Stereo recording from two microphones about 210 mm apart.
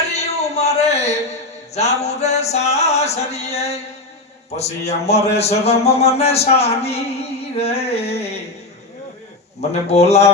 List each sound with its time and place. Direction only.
0.1 s a sound: 30° left (ahead or behind)
1.7 s music: 30° left (ahead or behind)
4.9 s a man's voice: 30° left (ahead or behind)
9.6 s music: 30° left (ahead or behind)